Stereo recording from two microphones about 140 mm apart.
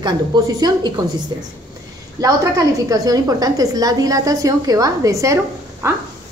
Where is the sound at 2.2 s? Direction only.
25° right (ahead or behind).